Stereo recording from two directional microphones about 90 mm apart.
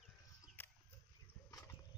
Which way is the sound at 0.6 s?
25° left (ahead or behind).